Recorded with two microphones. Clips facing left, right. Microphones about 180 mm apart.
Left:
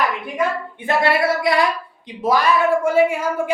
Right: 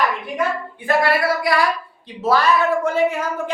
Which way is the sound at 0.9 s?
25° left (ahead or behind).